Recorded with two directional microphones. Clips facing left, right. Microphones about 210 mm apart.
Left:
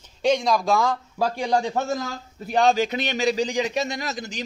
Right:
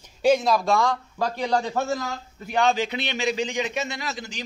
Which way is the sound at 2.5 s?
40° left (ahead or behind).